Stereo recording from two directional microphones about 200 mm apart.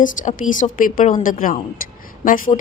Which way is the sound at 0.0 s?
40° left (ahead or behind).